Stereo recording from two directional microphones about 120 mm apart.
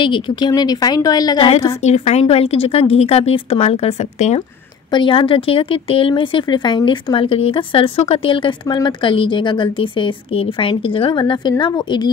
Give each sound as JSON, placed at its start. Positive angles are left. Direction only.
{"t": 0.0, "sound": "speech", "side_deg": 40}
{"t": 1.7, "sound": "speech", "side_deg": 65}
{"t": 4.9, "sound": "speech", "side_deg": 45}